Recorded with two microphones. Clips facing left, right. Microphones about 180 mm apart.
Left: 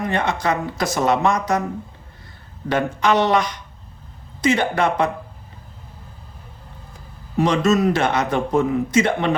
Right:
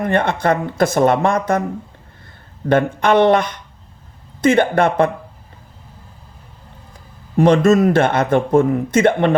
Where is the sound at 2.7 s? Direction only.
55° right (ahead or behind).